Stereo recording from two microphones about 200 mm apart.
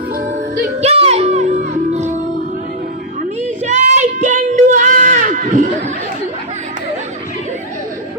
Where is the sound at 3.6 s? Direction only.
35° right (ahead or behind).